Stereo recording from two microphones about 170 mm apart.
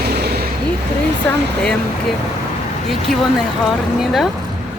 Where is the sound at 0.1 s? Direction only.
70° right (ahead or behind).